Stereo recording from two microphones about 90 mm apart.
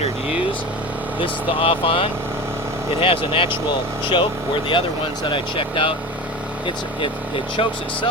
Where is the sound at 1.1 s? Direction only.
80° left.